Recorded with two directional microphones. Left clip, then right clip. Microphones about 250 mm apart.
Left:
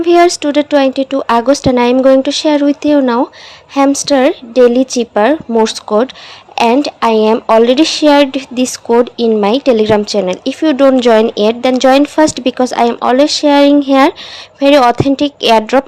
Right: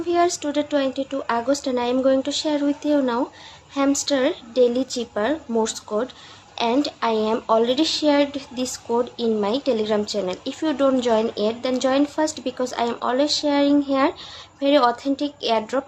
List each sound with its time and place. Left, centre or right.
0.0 s a woman's voice: left